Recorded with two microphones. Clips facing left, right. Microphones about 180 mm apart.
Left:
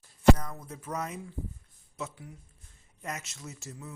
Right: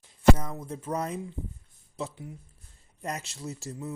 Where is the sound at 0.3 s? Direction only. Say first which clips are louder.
Right 5 dB; 25° right (ahead or behind).